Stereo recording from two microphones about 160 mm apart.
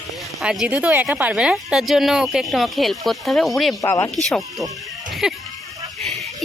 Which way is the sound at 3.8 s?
15° left (ahead or behind).